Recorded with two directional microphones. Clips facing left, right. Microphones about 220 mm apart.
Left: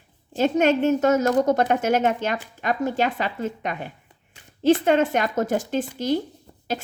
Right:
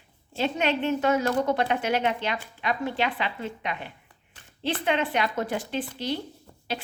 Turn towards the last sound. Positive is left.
turn(degrees=45)  # may be behind; listen again after turning